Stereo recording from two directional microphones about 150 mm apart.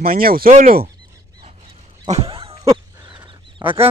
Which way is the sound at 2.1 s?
40° right (ahead or behind).